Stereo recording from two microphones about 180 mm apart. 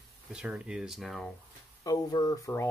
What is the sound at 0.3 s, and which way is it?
Speech, 5° right (ahead or behind).